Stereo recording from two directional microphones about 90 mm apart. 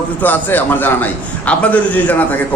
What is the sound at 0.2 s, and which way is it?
A man's voice, 20° left (ahead or behind).